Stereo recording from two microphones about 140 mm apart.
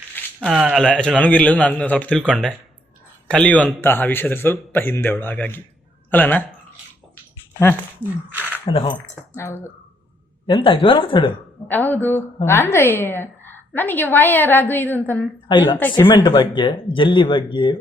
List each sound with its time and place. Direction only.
0.3 s speech: 5° right (ahead or behind)
0.8 s a woman's voice: 5° left (ahead or behind)
8.3 s a sound: 10° right (ahead or behind)
8.6 s speech: 45° left (ahead or behind)
9.3 s speech: 20° left (ahead or behind)
10.4 s speech: 40° left (ahead or behind)
11.7 s a woman's voice: 10° left (ahead or behind)
15.4 s speech: 35° left (ahead or behind)